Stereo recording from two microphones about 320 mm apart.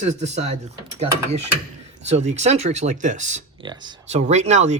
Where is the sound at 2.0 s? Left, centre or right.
Right.